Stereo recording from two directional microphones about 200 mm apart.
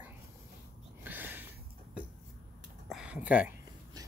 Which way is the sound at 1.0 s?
10° right (ahead or behind).